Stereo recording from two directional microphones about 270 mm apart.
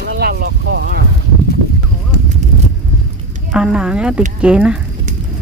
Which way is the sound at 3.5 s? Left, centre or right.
Centre.